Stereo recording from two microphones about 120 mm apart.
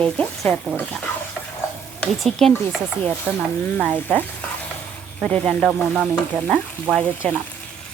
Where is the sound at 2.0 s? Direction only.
10° left (ahead or behind).